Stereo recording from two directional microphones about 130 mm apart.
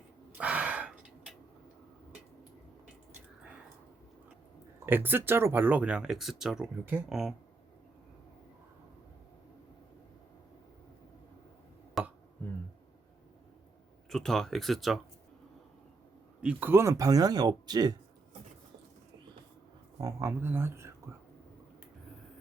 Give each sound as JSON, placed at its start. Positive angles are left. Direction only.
{"t": 0.3, "sound": "a sound", "side_deg": -10}
{"t": 4.9, "sound": "speech", "side_deg": -15}
{"t": 12.0, "sound": "a sound", "side_deg": 0}
{"t": 14.1, "sound": "speech", "side_deg": 5}
{"t": 16.4, "sound": "speech", "side_deg": -10}
{"t": 20.0, "sound": "speech", "side_deg": -25}